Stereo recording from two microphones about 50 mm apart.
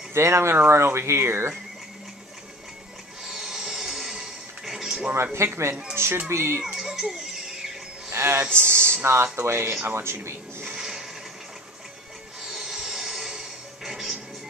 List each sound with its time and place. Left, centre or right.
0.1 s speech: right
3.3 s music: centre
5.1 s speech: right
6.6 s music: centre
8.1 s a man's voice: right
8.5 s speech: left
9.0 s speech: right
9.3 s speech: right
9.8 s speech: right
10.8 s a sound: centre
12.4 s music: centre